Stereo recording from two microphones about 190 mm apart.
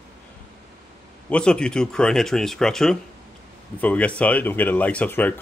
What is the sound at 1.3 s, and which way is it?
Speech, 5° left (ahead or behind).